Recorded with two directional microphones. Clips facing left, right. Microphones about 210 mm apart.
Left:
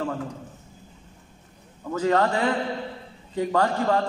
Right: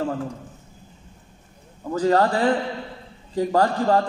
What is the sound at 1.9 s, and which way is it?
A man's voice, 35° right (ahead or behind).